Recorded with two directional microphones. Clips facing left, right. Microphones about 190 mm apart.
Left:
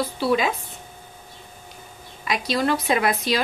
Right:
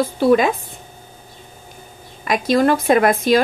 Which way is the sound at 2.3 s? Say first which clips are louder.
Right 7 dB; 50° right (ahead or behind).